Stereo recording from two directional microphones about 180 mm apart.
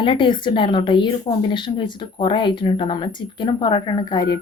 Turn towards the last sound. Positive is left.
turn(degrees=20)  # may be behind; listen again after turning